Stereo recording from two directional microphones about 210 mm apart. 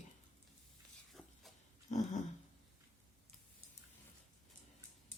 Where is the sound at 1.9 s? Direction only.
35° left (ahead or behind).